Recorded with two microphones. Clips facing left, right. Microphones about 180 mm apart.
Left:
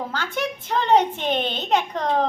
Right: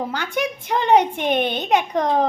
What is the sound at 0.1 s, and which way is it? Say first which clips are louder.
A woman's voice: right 3 dB; 15° right (ahead or behind).